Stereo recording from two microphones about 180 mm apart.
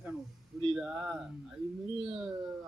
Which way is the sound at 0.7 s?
5° right (ahead or behind).